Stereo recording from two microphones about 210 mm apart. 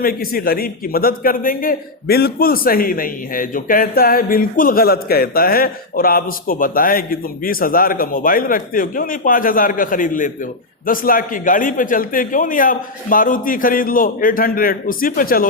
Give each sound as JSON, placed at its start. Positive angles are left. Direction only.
{"t": 0.0, "sound": "a man's voice", "side_deg": 45}